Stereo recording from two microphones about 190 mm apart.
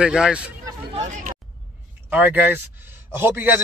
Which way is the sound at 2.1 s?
10° right (ahead or behind).